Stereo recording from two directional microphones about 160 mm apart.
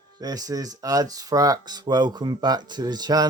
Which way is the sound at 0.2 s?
25° right (ahead or behind).